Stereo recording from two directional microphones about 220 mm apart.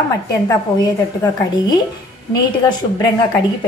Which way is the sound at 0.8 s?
15° left (ahead or behind).